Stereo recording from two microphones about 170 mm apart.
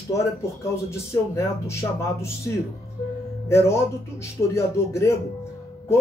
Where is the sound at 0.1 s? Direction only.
15° left (ahead or behind).